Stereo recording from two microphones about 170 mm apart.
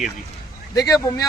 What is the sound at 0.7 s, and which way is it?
Speech, 20° left (ahead or behind).